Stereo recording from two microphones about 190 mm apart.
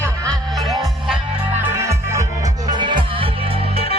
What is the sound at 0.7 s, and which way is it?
Music, centre (ahead or behind).